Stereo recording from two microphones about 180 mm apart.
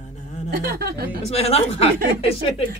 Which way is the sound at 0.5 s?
60° right (ahead or behind).